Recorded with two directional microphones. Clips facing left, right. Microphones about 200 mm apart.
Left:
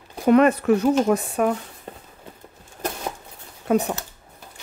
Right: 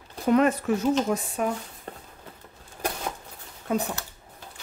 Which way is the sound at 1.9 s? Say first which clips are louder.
Left 1 dB; 10° left (ahead or behind).